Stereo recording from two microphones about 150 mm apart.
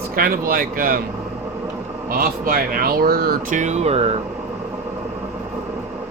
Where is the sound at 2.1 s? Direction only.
75° right (ahead or behind).